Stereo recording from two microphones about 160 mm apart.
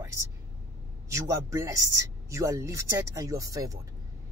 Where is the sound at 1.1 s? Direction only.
20° right (ahead or behind).